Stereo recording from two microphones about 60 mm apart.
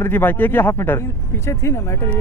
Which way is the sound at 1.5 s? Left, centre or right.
Left.